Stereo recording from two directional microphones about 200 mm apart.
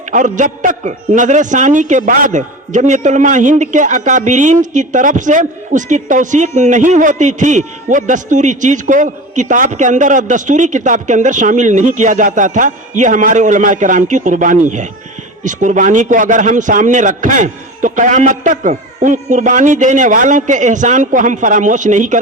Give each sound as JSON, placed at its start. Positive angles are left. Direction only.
{"t": 0.1, "sound": "a man's voice", "side_deg": -40}